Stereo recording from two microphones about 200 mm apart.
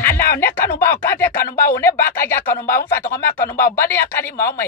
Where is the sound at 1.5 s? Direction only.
50° left (ahead or behind).